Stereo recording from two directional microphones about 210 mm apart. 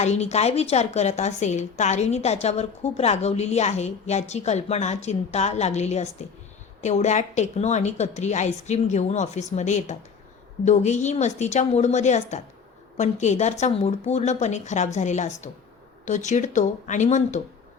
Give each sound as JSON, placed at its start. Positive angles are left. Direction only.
{"t": 0.0, "sound": "a woman's voice", "side_deg": 30}